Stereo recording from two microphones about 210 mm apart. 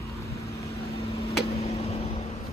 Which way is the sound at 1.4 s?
30° left (ahead or behind).